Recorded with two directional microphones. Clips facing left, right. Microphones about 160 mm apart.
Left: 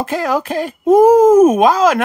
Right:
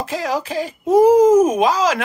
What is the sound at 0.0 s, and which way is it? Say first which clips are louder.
Speech: left 4 dB; 55° left (ahead or behind).